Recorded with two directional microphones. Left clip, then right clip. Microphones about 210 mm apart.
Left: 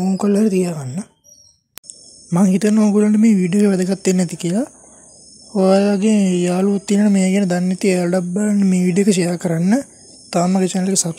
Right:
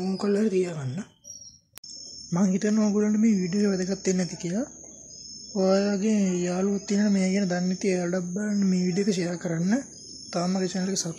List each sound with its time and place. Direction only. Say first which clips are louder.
0.0 s speech: left 8 dB; 25° left (ahead or behind)
2.3 s speech: left 9 dB; 40° left (ahead or behind)
5.5 s a sound: left 9 dB; 40° left (ahead or behind)